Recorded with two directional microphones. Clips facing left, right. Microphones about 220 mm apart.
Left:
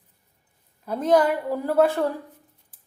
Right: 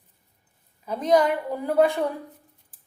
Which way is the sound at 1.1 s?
5° left (ahead or behind).